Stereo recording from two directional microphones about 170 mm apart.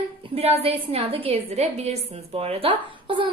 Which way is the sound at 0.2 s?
35° right (ahead or behind).